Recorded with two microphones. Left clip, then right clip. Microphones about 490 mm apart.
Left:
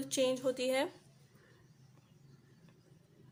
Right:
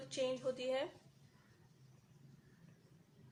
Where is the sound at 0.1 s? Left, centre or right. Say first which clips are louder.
Left 6 dB; right.